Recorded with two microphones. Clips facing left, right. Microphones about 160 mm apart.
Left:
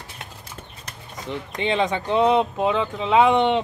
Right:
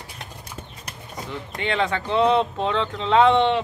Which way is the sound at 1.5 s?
20° left (ahead or behind).